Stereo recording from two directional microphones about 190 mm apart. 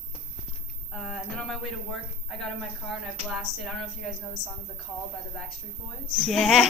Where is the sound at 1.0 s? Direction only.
Centre (ahead or behind).